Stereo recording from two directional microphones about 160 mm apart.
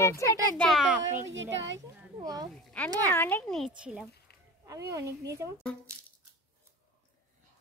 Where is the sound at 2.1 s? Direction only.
25° right (ahead or behind).